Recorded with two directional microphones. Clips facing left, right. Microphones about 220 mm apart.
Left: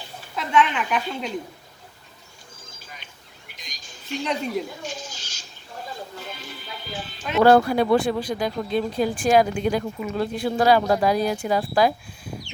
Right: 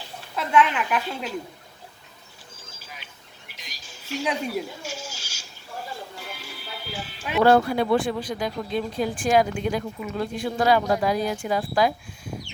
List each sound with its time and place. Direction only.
0.3 s a woman's voice: 5° right (ahead or behind)
2.6 s a sound: 5° right (ahead or behind)
6.1 s music: 10° right (ahead or behind)
7.3 s speech: 40° left (ahead or behind)